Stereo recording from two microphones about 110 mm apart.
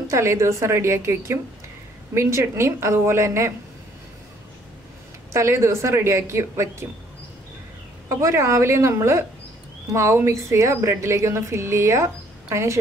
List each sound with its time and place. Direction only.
0.1 s a woman's voice: 25° right (ahead or behind)
5.3 s a woman's voice: 25° right (ahead or behind)
8.1 s a woman's voice: 25° right (ahead or behind)